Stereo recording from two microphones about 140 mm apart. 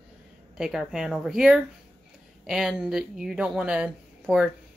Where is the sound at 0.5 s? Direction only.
5° right (ahead or behind).